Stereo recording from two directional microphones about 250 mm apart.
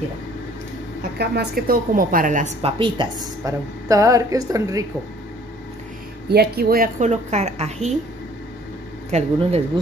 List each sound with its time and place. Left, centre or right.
1.1 s a woman's voice: right; by 4.8 s centre
6.2 s a woman's voice: right
9.1 s a woman's voice: right